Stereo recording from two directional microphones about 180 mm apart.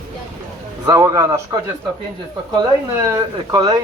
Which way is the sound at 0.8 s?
15° right (ahead or behind).